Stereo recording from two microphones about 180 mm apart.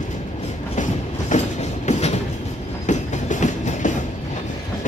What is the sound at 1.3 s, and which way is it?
Train, 40° left (ahead or behind).